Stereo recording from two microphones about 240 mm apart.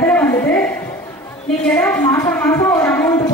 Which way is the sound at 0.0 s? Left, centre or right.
Centre.